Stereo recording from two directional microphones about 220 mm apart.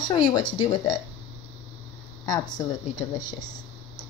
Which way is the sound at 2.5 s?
20° left (ahead or behind).